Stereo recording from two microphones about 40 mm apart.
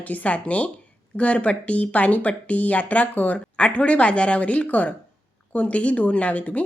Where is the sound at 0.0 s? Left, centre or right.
Left.